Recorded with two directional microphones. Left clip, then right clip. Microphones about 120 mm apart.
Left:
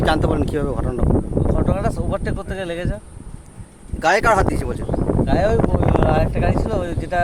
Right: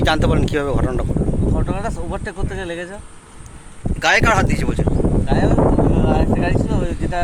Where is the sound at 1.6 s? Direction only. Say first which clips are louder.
Left 3 dB; 45° left (ahead or behind).